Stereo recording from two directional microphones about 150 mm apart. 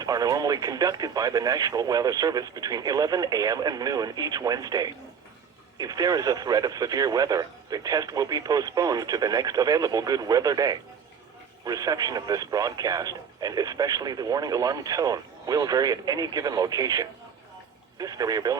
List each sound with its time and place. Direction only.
0.0 s speech: 25° right (ahead or behind)